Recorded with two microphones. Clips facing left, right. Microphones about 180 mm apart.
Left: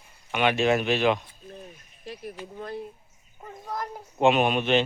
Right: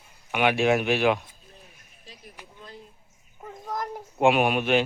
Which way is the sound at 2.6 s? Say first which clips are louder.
Left 11 dB; 65° left (ahead or behind).